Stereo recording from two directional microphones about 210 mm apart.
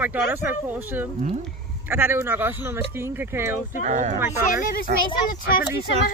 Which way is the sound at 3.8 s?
35° right (ahead or behind).